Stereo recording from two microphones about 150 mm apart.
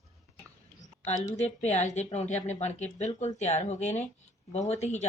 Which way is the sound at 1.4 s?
50° left (ahead or behind).